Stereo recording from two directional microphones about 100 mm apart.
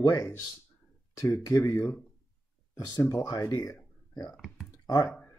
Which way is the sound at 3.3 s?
35° left (ahead or behind).